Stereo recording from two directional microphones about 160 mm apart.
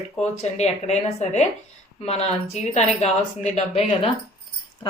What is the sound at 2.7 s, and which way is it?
A woman's voice, 45° left (ahead or behind).